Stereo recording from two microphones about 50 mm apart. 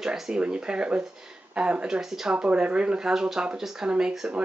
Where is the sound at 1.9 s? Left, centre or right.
Centre.